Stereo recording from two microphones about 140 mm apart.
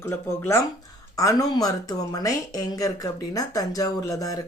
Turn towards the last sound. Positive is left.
turn(degrees=25)  # may be behind; listen again after turning